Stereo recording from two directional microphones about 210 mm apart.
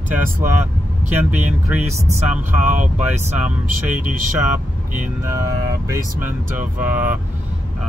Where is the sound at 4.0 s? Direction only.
40° right (ahead or behind).